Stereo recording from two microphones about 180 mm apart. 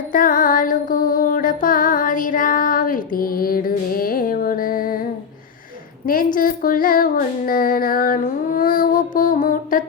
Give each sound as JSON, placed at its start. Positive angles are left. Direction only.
{"t": 0.1, "sound": "music", "side_deg": 50}
{"t": 6.1, "sound": "child singing", "side_deg": 50}